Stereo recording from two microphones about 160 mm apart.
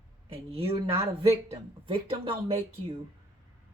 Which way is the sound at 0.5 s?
35° right (ahead or behind).